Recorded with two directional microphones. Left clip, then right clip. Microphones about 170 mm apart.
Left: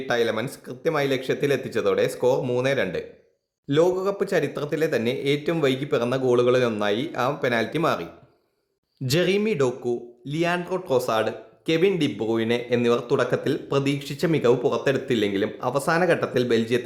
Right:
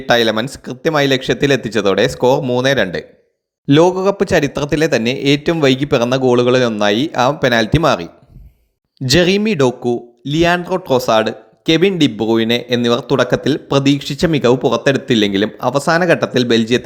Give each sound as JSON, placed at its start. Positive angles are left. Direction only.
{"t": 0.0, "sound": "speech", "side_deg": -40}